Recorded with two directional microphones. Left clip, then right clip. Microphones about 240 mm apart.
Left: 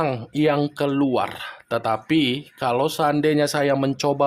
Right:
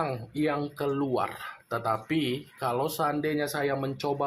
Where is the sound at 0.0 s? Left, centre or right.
Left.